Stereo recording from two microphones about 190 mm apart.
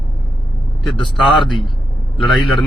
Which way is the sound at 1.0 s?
25° left (ahead or behind).